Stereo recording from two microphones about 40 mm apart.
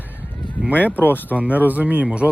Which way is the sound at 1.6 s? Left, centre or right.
Right.